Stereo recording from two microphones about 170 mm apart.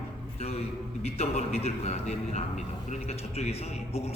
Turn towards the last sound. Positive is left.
turn(degrees=40)  # may be behind; listen again after turning